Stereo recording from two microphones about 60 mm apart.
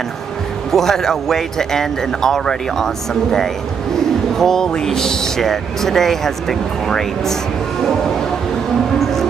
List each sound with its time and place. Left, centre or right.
0.7 s speech: centre